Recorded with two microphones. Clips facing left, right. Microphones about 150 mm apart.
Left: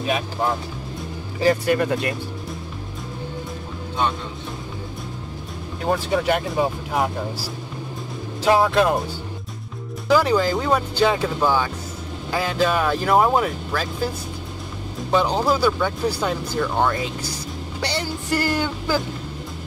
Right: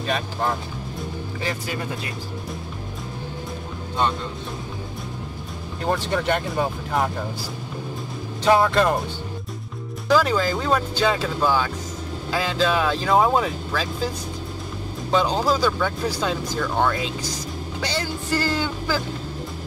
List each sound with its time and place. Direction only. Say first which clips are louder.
0.0 s speech: left 2 dB; 5° left (ahead or behind)
1.7 s speech: left 9 dB; 65° left (ahead or behind)
5.9 s speech: left 2 dB; 5° left (ahead or behind)
8.5 s speech: left 1 dB; 5° left (ahead or behind)
10.0 s speech: left 2 dB; 10° left (ahead or behind)
15.0 s speech: left 1 dB; 10° left (ahead or behind)